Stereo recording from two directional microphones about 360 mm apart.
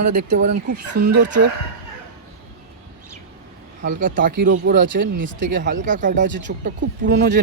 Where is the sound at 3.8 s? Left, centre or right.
Right.